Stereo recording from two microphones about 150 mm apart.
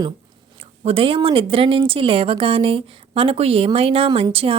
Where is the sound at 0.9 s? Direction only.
35° right (ahead or behind).